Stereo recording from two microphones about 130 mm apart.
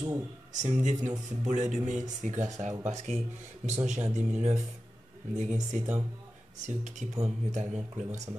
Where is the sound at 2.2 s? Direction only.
65° right (ahead or behind).